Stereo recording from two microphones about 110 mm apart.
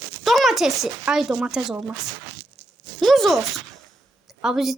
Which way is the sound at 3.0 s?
Centre (ahead or behind).